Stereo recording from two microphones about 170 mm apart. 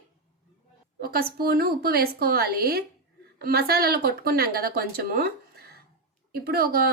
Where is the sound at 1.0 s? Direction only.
60° right (ahead or behind).